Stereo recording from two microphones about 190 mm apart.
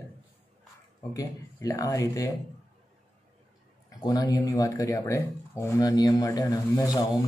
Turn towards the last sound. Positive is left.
turn(degrees=20)  # may be behind; listen again after turning